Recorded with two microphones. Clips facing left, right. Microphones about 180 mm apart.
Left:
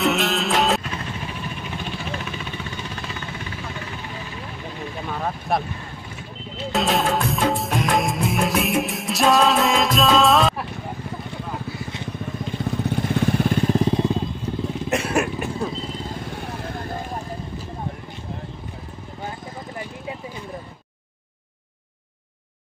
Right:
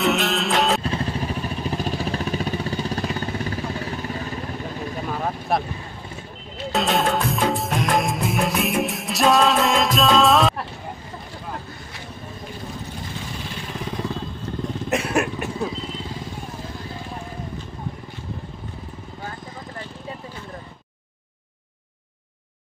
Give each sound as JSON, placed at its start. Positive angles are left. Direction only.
{"t": 0.0, "sound": "music", "side_deg": 0}
{"t": 0.8, "sound": "vehicle", "side_deg": -35}
{"t": 5.1, "sound": "vehicle", "side_deg": 0}
{"t": 6.7, "sound": "music", "side_deg": 0}
{"t": 13.1, "sound": "vehicle", "side_deg": 60}
{"t": 13.7, "sound": "vehicle", "side_deg": 25}
{"t": 14.6, "sound": "motorcycle", "side_deg": 0}
{"t": 16.3, "sound": "vehicle", "side_deg": 70}